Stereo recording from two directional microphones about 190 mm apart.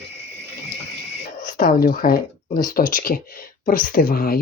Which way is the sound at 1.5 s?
50° left (ahead or behind).